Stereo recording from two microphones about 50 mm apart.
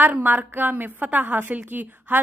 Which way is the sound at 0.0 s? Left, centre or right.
Right.